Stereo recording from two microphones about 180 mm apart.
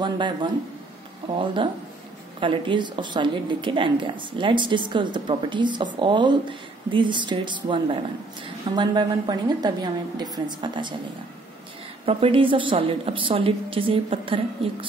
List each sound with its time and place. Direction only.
0.0 s a woman's voice: 25° right (ahead or behind)
12.1 s a woman's voice: 30° right (ahead or behind)